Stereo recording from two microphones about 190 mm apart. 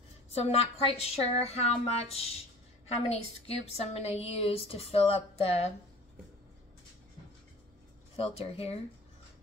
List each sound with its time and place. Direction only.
0.3 s a woman's voice: 35° left (ahead or behind)
8.2 s a woman's voice: 30° left (ahead or behind)